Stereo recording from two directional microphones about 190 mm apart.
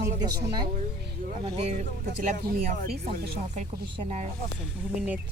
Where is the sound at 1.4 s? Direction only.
25° right (ahead or behind).